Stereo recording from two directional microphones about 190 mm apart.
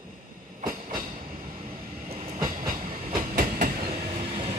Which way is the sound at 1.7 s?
30° right (ahead or behind).